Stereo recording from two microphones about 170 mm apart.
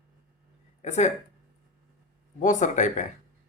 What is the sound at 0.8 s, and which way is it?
Speech, 40° left (ahead or behind).